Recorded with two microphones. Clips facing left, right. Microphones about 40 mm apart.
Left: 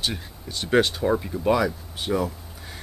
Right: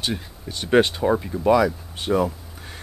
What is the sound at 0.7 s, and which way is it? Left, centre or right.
Speech, centre.